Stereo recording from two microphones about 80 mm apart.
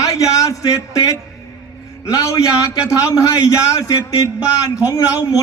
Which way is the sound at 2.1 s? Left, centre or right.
Left.